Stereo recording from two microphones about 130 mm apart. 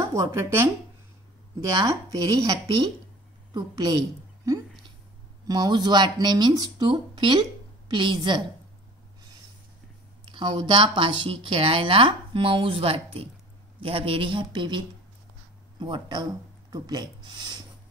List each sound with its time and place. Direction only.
0.1 s speech: 25° right (ahead or behind)
10.2 s speech: 40° right (ahead or behind)